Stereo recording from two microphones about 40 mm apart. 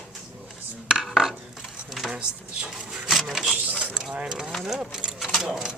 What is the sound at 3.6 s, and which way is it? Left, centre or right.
Mechanisms, right.